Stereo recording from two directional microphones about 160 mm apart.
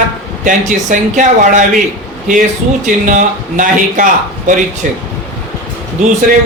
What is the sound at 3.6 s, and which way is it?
A man's voice, 55° right (ahead or behind).